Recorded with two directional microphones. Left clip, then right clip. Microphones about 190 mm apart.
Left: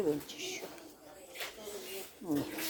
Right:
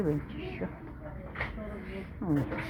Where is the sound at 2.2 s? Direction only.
20° left (ahead or behind).